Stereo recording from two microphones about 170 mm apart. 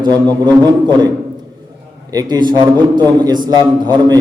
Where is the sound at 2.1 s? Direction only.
25° right (ahead or behind).